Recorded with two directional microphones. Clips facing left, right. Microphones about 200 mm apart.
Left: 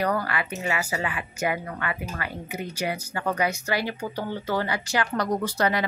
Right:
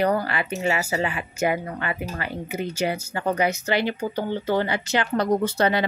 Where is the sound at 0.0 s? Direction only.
25° right (ahead or behind).